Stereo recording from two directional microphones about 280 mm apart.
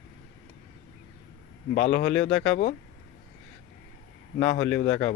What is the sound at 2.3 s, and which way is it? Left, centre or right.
Speech, centre.